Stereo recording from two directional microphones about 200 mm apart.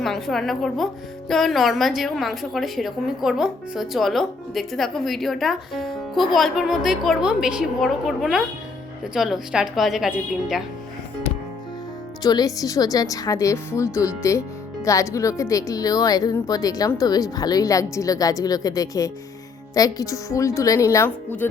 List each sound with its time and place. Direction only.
0.0 s a woman's voice: centre (ahead or behind)
12.2 s speech: 20° left (ahead or behind)